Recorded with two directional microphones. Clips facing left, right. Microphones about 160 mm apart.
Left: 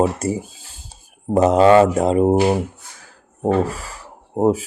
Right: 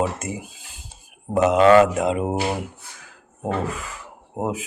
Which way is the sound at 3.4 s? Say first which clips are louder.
Left 7 dB; 35° left (ahead or behind).